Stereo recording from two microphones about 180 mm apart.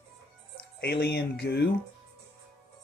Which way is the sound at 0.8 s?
65° left (ahead or behind).